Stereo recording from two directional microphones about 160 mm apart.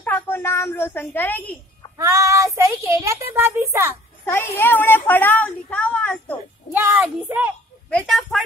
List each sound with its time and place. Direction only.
0.0 s a woman's voice: 15° left (ahead or behind)
2.0 s a child's voice: 20° right (ahead or behind)
4.3 s a woman's voice: 15° left (ahead or behind)
6.7 s a child's voice: 15° right (ahead or behind)
7.9 s speech: 5° left (ahead or behind)